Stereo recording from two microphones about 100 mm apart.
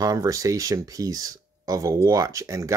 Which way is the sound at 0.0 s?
35° right (ahead or behind).